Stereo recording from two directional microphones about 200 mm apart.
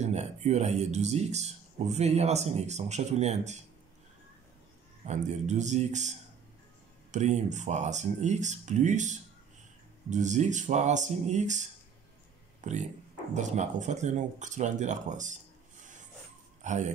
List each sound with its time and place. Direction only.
0.0 s speech: 35° right (ahead or behind)
5.0 s speech: 35° right (ahead or behind)
12.6 s speech: 40° right (ahead or behind)
16.6 s speech: 35° right (ahead or behind)